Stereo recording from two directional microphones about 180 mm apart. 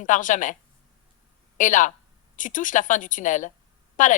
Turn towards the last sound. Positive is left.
turn(degrees=45)  # may be behind; listen again after turning